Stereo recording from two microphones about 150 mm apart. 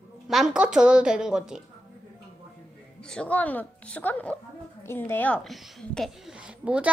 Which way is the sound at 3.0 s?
5° left (ahead or behind).